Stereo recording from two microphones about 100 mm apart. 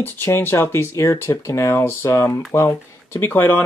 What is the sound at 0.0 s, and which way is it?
Speech, 20° left (ahead or behind).